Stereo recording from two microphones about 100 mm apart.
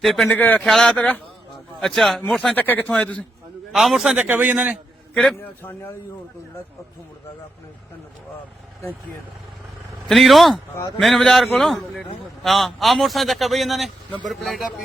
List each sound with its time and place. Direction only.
0.0 s a man's voice: centre (ahead or behind)
0.3 s a man's voice: 20° left (ahead or behind)
0.6 s a man's voice: 5° left (ahead or behind)
2.6 s a man's voice: 15° left (ahead or behind)
3.7 s a man's voice: 5° right (ahead or behind)
5.1 s a man's voice: 5° left (ahead or behind)
5.4 s a man's voice: 25° left (ahead or behind)
10.1 s a man's voice: centre (ahead or behind)